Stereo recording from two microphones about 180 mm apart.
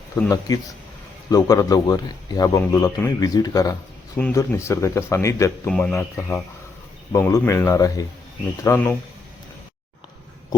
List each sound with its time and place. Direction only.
0.3 s a man's voice: 20° left (ahead or behind)
5.6 s speech: 5° left (ahead or behind)